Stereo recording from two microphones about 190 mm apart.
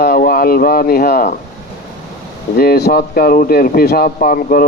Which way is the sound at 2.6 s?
55° left (ahead or behind).